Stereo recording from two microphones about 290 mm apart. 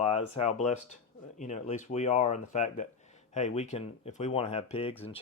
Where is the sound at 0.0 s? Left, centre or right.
Left.